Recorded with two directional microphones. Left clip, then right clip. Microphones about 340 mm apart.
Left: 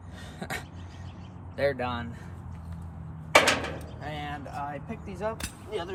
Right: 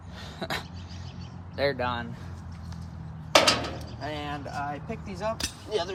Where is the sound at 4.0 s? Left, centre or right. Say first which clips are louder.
Right 3 dB; centre.